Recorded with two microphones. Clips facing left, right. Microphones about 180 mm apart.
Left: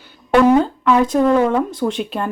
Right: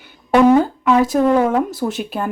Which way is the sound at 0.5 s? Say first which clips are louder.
Even; 5° right (ahead or behind).